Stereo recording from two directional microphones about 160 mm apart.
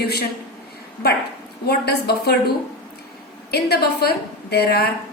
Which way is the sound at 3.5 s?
80° left.